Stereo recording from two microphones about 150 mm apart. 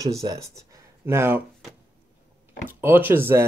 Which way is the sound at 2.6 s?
15° right (ahead or behind).